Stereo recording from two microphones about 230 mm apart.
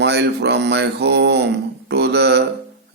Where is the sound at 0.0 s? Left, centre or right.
Right.